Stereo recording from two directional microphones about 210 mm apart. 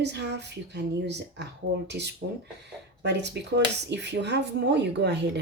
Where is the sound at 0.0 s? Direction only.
55° right (ahead or behind).